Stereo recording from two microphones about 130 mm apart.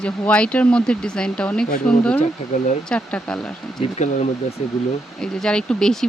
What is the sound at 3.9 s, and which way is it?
Speech, 65° left (ahead or behind).